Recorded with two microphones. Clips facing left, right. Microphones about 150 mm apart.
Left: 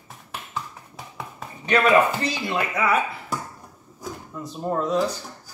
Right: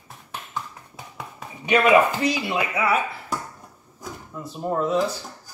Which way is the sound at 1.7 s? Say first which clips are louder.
Right 1 dB; 10° right (ahead or behind).